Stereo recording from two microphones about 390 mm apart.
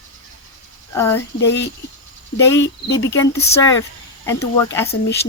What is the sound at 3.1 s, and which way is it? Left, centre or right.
Speech, centre.